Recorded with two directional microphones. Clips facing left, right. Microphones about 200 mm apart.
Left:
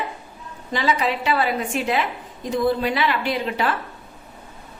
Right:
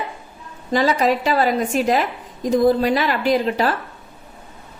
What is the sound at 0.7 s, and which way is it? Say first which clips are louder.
A woman's voice: right 5 dB; 40° right (ahead or behind).